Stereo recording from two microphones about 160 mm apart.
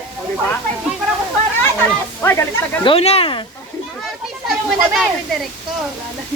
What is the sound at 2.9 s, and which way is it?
Speech, 40° left (ahead or behind).